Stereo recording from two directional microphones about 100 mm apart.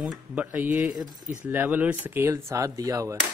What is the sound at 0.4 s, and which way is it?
Speech, 15° right (ahead or behind).